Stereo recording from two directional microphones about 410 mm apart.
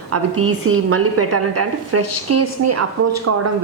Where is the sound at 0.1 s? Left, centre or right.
Right.